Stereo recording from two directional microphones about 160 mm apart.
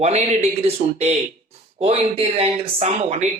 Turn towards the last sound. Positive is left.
turn(degrees=-40)  # may be behind; listen again after turning